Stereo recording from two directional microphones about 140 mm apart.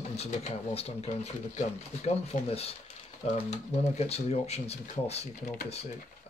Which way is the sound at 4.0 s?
50° left (ahead or behind).